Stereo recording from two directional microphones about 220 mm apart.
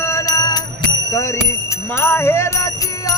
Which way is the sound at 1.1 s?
15° left (ahead or behind).